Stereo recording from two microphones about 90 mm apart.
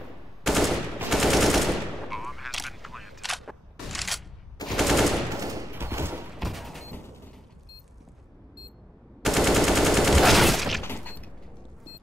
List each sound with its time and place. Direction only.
0.5 s machine gun: centre (ahead or behind)
5.4 s a sound: 40° right (ahead or behind)
6.3 s fusillade: centre (ahead or behind)
9.2 s gunshot: centre (ahead or behind)
10.8 s fusillade: 20° left (ahead or behind)